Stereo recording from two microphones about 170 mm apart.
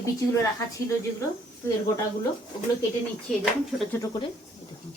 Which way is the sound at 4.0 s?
25° left (ahead or behind).